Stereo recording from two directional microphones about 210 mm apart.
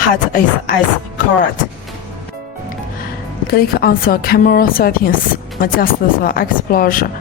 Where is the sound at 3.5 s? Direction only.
45° left (ahead or behind).